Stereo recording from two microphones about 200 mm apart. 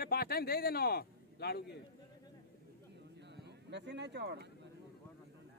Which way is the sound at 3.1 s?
60° right (ahead or behind).